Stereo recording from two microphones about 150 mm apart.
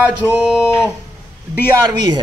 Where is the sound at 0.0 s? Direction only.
5° right (ahead or behind).